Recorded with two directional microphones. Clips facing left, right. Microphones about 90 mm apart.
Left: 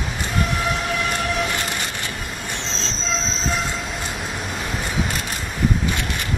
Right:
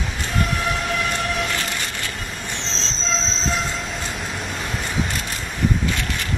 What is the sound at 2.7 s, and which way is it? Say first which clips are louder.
Train: right 1 dB; 5° left (ahead or behind).